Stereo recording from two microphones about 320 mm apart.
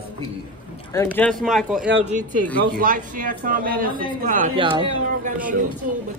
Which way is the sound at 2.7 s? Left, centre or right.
Right.